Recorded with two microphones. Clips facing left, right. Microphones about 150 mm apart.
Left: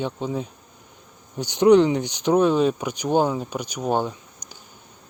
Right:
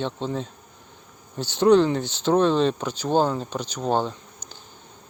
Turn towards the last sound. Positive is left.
turn(degrees=10)  # may be behind; listen again after turning